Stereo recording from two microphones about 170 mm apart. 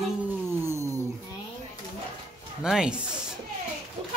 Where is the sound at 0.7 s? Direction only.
15° right (ahead or behind).